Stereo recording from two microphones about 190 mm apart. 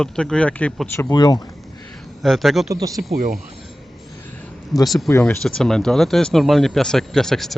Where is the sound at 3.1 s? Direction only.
45° right (ahead or behind).